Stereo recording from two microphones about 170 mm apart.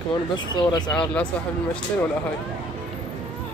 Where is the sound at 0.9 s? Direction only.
5° left (ahead or behind).